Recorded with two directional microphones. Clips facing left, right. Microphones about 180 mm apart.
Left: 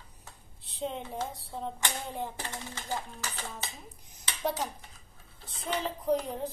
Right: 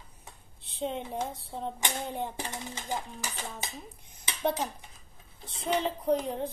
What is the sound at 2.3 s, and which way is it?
Speech, 15° right (ahead or behind).